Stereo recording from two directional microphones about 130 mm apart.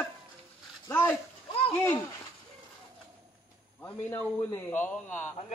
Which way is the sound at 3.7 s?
15° left (ahead or behind).